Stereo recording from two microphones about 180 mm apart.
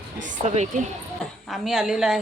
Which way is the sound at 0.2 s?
40° right (ahead or behind).